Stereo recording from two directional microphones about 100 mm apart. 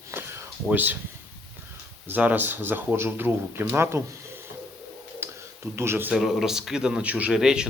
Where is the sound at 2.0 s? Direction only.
15° right (ahead or behind).